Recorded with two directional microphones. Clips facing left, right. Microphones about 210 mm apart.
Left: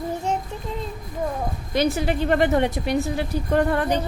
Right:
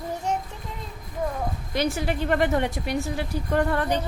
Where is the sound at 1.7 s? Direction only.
20° left (ahead or behind).